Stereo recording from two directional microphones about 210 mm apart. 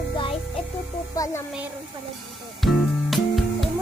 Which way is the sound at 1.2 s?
15° left (ahead or behind).